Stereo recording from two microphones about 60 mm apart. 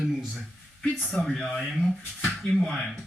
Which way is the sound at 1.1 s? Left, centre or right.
Centre.